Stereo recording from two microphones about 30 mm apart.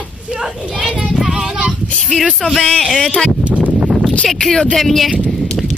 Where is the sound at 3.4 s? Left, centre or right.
Right.